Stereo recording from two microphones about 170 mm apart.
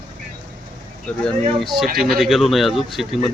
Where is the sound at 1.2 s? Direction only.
Centre (ahead or behind).